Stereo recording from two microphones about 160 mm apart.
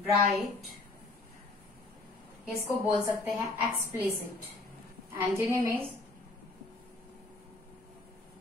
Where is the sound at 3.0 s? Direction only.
10° right (ahead or behind).